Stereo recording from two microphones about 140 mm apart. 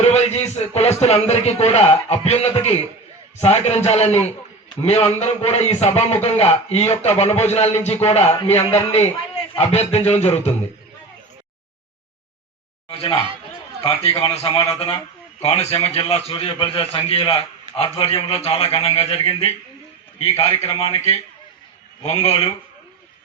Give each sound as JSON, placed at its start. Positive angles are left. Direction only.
{"t": 0.0, "sound": "a man's voice", "side_deg": 50}
{"t": 12.9, "sound": "speech", "side_deg": 40}
{"t": 14.2, "sound": "a man's voice", "side_deg": 45}